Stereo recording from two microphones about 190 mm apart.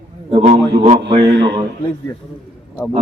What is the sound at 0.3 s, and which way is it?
Speech, 30° right (ahead or behind).